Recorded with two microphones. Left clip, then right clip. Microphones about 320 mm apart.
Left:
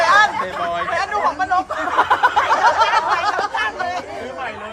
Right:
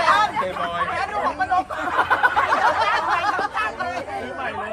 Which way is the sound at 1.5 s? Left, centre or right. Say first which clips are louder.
Left 3 dB; left.